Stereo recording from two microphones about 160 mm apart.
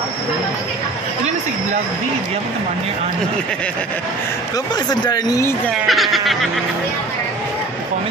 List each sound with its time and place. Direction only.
4.8 s speech: 25° left (ahead or behind)
5.7 s speech: centre (ahead or behind)